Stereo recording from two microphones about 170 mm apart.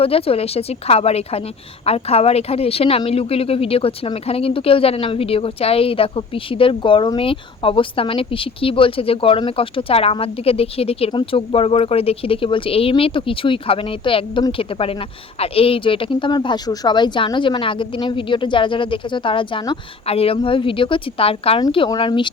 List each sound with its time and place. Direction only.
0.0 s a woman's voice: 35° left (ahead or behind)